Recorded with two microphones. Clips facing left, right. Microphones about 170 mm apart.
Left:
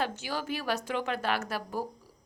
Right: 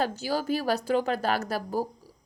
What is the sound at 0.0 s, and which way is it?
A woman's voice, 35° right (ahead or behind).